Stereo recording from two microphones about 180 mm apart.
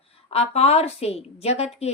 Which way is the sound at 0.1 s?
35° left (ahead or behind).